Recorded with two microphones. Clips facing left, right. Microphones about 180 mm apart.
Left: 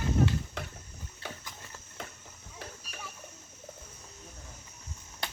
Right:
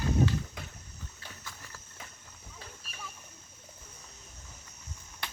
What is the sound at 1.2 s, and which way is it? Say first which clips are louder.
Horse: left 10 dB; 70° left (ahead or behind).